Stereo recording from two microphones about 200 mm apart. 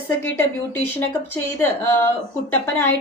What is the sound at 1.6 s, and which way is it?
A woman's voice, 10° left (ahead or behind).